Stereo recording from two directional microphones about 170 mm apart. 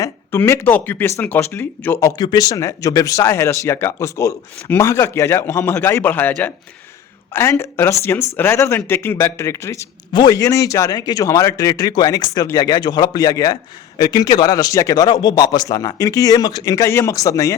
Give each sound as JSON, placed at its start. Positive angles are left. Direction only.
{"t": 0.0, "sound": "speech", "side_deg": 15}